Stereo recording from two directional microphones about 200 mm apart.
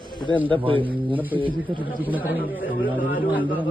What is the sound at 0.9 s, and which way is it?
A man's voice, 10° right (ahead or behind).